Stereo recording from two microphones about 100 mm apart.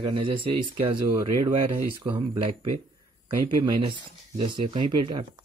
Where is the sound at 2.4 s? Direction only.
90° right.